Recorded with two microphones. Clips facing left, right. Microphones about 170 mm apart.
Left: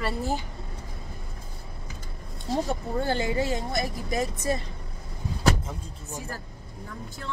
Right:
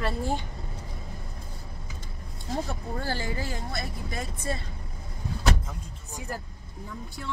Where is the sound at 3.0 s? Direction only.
20° left (ahead or behind).